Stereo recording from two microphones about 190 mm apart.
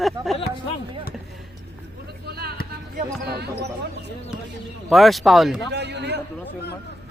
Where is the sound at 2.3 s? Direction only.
55° right (ahead or behind).